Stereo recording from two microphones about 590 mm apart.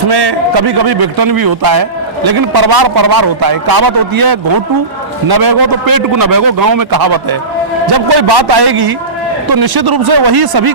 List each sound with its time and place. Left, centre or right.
0.1 s a man's voice: right